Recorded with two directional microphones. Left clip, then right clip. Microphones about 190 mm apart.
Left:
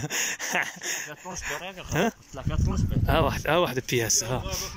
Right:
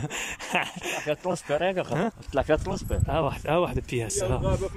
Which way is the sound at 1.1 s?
60° right (ahead or behind).